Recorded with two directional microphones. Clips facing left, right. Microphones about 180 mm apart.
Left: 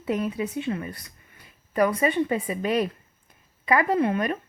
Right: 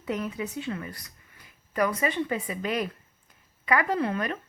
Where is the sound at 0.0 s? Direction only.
25° left (ahead or behind).